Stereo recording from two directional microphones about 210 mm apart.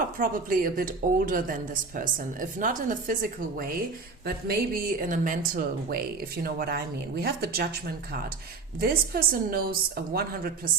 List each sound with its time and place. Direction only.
0.2 s a woman's voice: 40° right (ahead or behind)
8.8 s speech: 45° right (ahead or behind)